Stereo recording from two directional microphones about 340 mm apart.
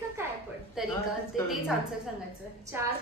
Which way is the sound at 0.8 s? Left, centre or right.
Centre.